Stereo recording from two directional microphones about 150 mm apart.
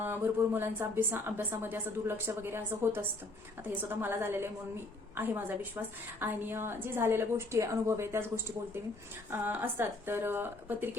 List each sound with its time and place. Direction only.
0.0 s a woman's voice: 15° right (ahead or behind)